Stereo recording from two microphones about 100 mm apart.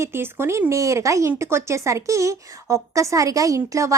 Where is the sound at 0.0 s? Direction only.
25° right (ahead or behind).